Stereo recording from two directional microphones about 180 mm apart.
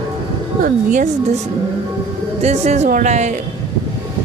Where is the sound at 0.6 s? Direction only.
45° right (ahead or behind).